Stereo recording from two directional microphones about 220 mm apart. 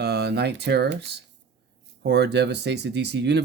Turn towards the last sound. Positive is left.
turn(degrees=-50)  # may be behind; listen again after turning